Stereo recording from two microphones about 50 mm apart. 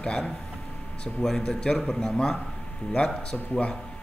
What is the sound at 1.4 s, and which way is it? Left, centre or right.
A man's voice, centre.